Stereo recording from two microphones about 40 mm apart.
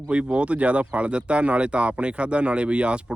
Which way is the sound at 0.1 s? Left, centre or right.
Right.